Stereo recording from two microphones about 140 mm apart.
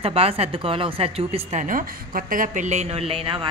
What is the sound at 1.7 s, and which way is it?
A woman's voice, 75° right (ahead or behind).